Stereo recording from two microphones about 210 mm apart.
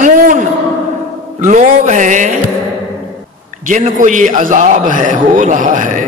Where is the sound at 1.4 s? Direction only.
35° right (ahead or behind).